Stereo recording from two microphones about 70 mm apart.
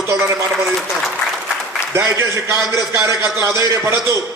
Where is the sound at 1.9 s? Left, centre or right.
Right.